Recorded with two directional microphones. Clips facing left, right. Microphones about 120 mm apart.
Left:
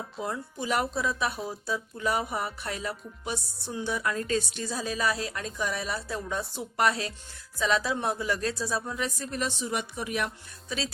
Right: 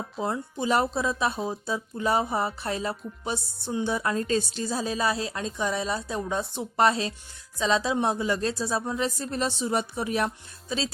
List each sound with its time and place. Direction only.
0.2 s speech: 30° right (ahead or behind)